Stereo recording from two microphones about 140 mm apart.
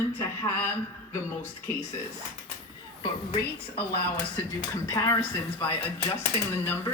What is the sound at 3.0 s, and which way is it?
Speech, 45° left (ahead or behind).